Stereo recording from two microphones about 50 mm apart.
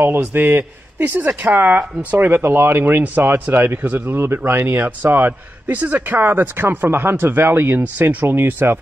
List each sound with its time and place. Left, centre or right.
0.2 s a man's voice: right
4.8 s speech: right